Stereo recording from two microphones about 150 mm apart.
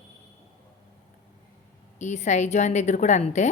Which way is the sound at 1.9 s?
50° left (ahead or behind).